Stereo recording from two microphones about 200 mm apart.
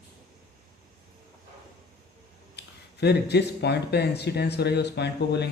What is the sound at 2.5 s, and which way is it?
Speech, 55° left (ahead or behind).